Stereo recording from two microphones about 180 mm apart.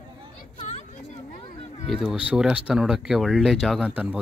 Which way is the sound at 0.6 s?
35° left (ahead or behind).